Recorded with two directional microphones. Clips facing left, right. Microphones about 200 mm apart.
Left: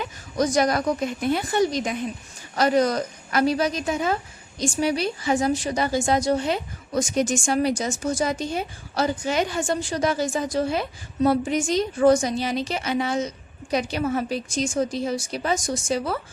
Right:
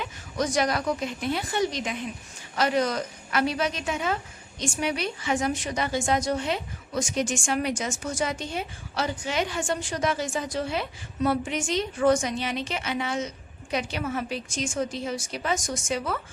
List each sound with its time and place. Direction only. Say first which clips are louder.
0.0 s a woman's voice: left 5 dB; 40° left (ahead or behind)